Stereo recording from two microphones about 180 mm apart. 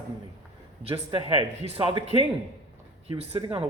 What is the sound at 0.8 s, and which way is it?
A man's voice, 30° right (ahead or behind).